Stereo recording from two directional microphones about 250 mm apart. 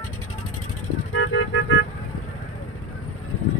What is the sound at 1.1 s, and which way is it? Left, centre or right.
Vehicle, left.